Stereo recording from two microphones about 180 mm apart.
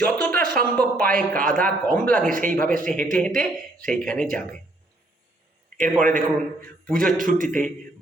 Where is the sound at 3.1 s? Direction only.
5° left (ahead or behind).